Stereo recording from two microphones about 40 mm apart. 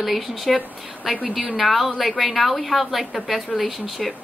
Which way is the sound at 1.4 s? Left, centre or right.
Right.